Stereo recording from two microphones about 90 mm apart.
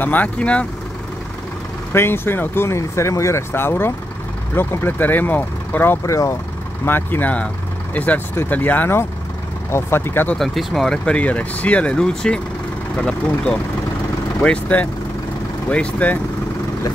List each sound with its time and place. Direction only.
0.0 s speech: 20° left (ahead or behind)
1.9 s speech: 25° left (ahead or behind)
6.0 s speech: 35° left (ahead or behind)
6.8 s speech: 25° left (ahead or behind)
10.3 s speech: centre (ahead or behind)